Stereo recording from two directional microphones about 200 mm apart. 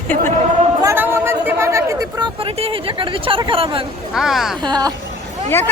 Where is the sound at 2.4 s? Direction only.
30° right (ahead or behind).